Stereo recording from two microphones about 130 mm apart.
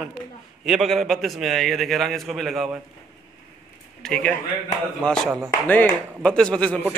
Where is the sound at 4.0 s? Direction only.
5° left (ahead or behind).